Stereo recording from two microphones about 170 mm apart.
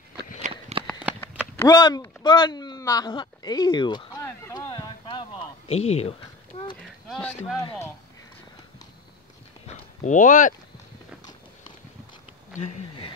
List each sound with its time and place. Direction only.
0.4 s walk: 40° right (ahead or behind)
1.6 s speech: 25° left (ahead or behind)
4.2 s a sound: 15° left (ahead or behind); by 6.1 s 40° left (ahead or behind)
7.1 s speech: 5° left (ahead or behind)
10.0 s speech: 50° left (ahead or behind)